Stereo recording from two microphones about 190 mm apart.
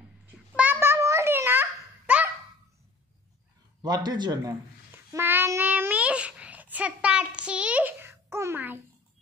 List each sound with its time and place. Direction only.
0.6 s babbling: 10° right (ahead or behind)
3.8 s speech: 20° right (ahead or behind)
5.1 s babbling: 10° right (ahead or behind)